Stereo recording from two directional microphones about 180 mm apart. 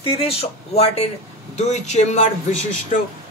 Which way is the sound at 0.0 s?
35° left (ahead or behind).